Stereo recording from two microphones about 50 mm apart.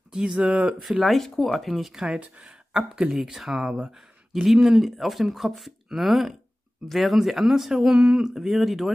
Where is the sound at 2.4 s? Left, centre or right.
Centre.